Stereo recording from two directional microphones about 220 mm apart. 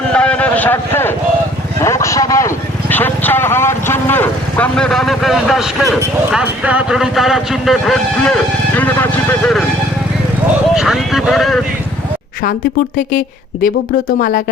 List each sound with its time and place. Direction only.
0.1 s a sound: 5° left (ahead or behind)
1.8 s vehicle: 15° left (ahead or behind)
6.3 s speech: 5° right (ahead or behind)
10.8 s speech: centre (ahead or behind)
14.2 s speech: 35° left (ahead or behind)